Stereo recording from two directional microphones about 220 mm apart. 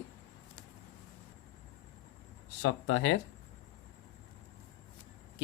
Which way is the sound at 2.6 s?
65° left (ahead or behind).